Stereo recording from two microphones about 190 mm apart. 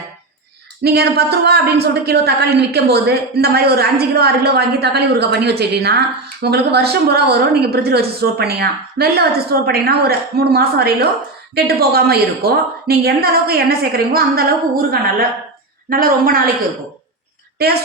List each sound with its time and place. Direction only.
0.8 s a woman's voice: 60° right (ahead or behind)
15.9 s a woman's voice: 50° right (ahead or behind)
17.6 s a woman's voice: 55° right (ahead or behind)